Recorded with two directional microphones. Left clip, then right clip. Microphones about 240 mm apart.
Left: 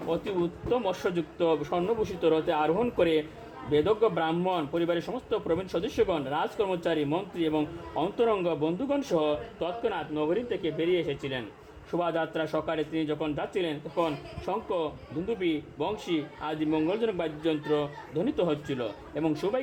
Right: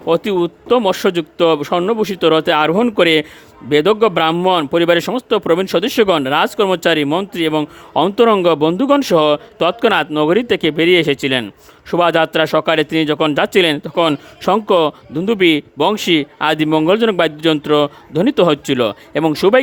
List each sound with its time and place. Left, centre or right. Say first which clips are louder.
0.1 s a man's voice: right 15 dB; right